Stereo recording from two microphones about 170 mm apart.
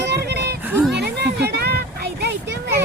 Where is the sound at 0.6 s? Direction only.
10° right (ahead or behind).